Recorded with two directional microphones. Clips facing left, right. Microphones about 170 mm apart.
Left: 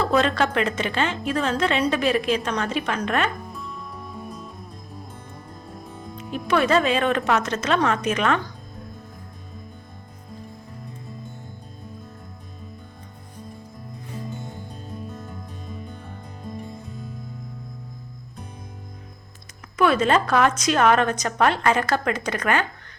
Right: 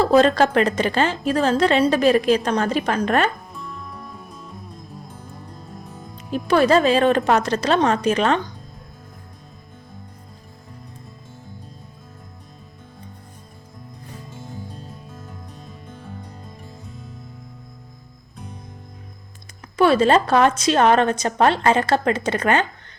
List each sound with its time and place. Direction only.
0.0 s a woman's voice: 35° right (ahead or behind)
3.4 s music: centre (ahead or behind)
6.5 s a woman's voice: 35° right (ahead or behind)
15.1 s music: centre (ahead or behind)
19.7 s a woman's voice: 30° right (ahead or behind)